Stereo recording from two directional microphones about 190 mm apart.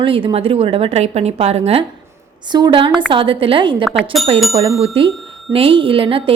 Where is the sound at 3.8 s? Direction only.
Centre (ahead or behind).